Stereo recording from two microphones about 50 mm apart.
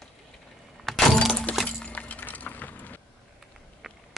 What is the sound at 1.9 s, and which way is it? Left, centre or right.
Music, left.